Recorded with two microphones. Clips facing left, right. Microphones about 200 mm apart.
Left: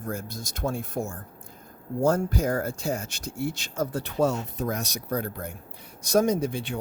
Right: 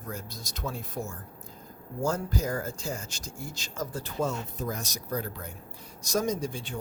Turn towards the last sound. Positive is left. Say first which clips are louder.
# left 5 dB
turn(degrees=65)  # may be behind; listen again after turning